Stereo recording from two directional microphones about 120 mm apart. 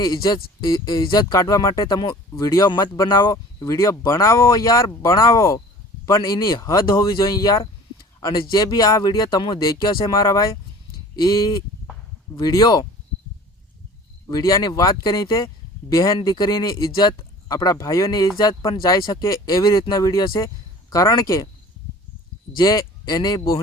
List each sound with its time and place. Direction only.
0.6 s speech: 35° left (ahead or behind)
14.3 s speech: 30° left (ahead or behind)
22.5 s speech: 30° left (ahead or behind)